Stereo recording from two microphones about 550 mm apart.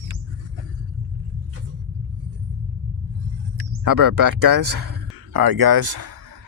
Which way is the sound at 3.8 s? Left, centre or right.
Right.